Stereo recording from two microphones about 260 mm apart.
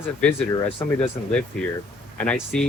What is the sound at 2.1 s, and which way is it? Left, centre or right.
Speech, centre.